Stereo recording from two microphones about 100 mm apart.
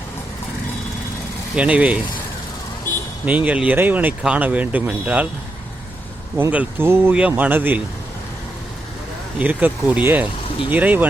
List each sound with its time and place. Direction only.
1.5 s speech: 10° right (ahead or behind)
3.2 s speech: 15° right (ahead or behind)
6.3 s speech: 15° right (ahead or behind)
7.2 s speech: 15° right (ahead or behind)
9.4 s speech: 15° right (ahead or behind)